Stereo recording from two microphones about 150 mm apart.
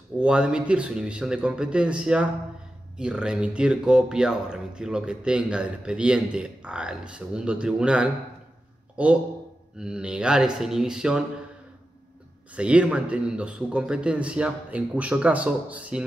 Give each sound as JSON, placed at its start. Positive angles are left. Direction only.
{"t": 0.2, "sound": "a man's voice", "side_deg": -5}
{"t": 12.5, "sound": "a man's voice", "side_deg": -5}